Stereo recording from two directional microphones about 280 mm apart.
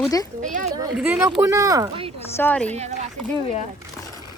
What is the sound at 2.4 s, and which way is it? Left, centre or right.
Speech, centre.